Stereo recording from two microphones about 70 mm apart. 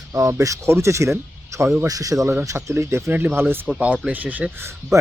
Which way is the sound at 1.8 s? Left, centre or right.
Right.